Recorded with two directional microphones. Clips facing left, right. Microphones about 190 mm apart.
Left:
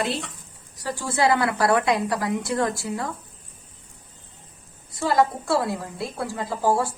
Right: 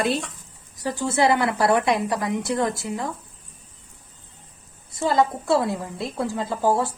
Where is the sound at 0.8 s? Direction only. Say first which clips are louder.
Right 2 dB; 20° right (ahead or behind).